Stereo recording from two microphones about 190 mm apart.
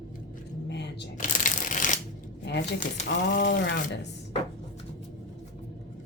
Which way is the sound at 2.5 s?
65° left (ahead or behind).